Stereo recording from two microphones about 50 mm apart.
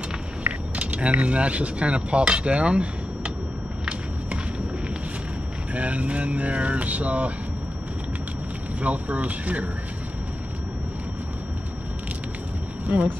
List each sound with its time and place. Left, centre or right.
0.5 s speech: right
5.8 s speech: right
8.7 s speech: right
12.8 s speech: right